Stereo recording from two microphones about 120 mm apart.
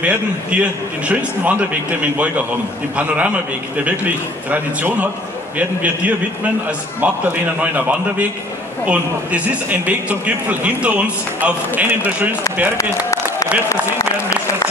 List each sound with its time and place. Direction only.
0.0 s speech: 10° right (ahead or behind)
8.8 s speech: 10° right (ahead or behind)
12.7 s clapping: 25° left (ahead or behind)
13.7 s a sound: 25° left (ahead or behind)